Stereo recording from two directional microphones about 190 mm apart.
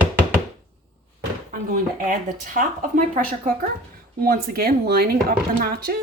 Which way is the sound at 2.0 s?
40° right (ahead or behind).